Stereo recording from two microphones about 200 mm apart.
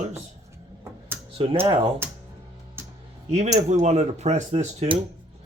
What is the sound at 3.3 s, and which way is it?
Speech, 35° right (ahead or behind).